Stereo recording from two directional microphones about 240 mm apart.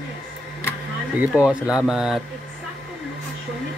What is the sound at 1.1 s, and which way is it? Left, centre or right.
Speech, centre.